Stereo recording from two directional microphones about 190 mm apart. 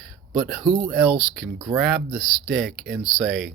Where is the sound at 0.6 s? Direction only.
25° right (ahead or behind).